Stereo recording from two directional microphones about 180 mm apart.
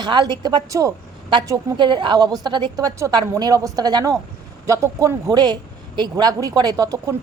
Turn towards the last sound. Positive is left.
turn(degrees=-20)  # may be behind; listen again after turning